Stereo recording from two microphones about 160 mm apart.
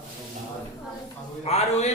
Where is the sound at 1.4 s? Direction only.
40° left (ahead or behind).